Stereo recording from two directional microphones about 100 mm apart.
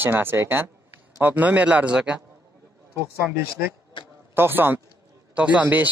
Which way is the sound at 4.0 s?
50° left (ahead or behind).